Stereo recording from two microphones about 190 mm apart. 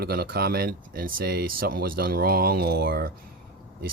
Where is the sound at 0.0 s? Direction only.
55° right (ahead or behind).